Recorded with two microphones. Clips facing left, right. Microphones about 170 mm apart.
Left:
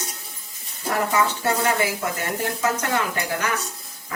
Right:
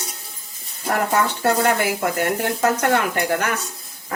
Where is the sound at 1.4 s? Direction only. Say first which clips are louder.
Right 3 dB; 60° right (ahead or behind).